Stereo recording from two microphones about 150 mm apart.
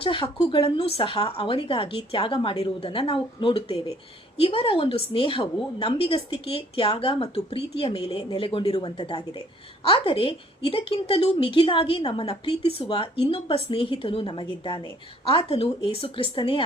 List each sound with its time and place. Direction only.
0.0 s a woman's voice: 35° left (ahead or behind)